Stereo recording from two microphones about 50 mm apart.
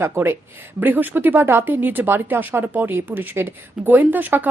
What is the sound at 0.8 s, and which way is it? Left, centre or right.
Speech, right.